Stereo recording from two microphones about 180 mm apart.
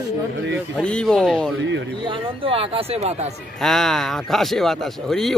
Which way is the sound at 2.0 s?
30° right (ahead or behind).